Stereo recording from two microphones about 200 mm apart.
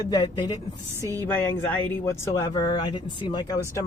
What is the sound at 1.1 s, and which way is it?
Speech, 10° left (ahead or behind).